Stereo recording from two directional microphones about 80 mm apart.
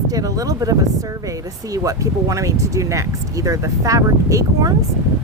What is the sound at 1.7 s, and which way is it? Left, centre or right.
Speech, right.